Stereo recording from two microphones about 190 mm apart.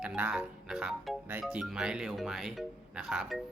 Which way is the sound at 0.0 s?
5° right (ahead or behind).